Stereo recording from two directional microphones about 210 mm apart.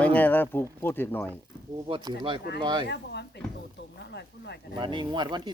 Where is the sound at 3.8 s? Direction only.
55° left (ahead or behind).